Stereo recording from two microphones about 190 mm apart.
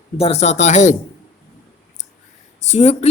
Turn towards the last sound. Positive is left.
turn(degrees=35)  # may be behind; listen again after turning